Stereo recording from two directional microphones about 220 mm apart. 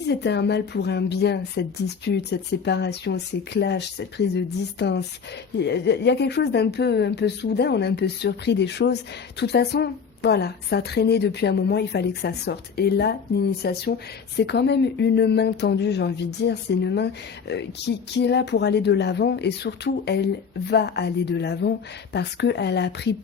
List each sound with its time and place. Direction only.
0.1 s a woman's voice: 50° left (ahead or behind)